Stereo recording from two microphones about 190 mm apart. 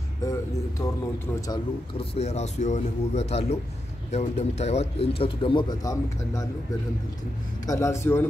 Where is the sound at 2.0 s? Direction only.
35° left (ahead or behind); by 6.5 s 20° left (ahead or behind).